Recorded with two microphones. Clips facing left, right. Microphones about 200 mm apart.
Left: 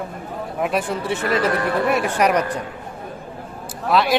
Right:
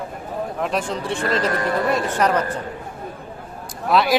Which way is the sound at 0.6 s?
5° left (ahead or behind).